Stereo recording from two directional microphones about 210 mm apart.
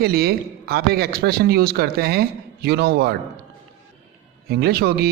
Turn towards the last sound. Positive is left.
turn(degrees=-50)  # may be behind; listen again after turning